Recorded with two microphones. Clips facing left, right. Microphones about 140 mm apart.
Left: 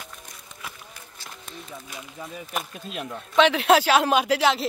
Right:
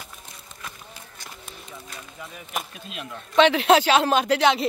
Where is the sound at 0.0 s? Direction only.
5° right (ahead or behind).